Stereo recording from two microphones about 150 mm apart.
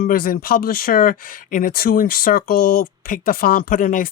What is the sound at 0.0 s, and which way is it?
Speech, 75° left (ahead or behind).